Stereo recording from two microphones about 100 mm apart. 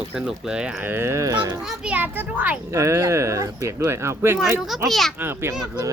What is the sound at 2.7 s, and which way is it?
Speech, 30° right (ahead or behind).